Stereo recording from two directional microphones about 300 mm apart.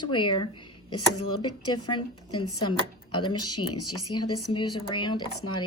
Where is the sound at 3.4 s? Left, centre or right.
Left.